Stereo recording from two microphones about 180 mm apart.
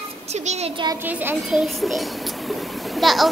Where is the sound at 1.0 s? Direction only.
10° right (ahead or behind).